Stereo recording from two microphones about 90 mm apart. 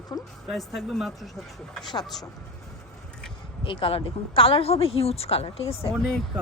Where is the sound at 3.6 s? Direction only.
75° left (ahead or behind).